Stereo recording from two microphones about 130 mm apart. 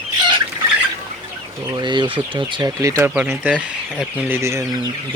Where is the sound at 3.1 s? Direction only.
10° right (ahead or behind).